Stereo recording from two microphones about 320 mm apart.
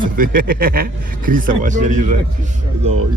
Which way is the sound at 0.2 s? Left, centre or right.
Right.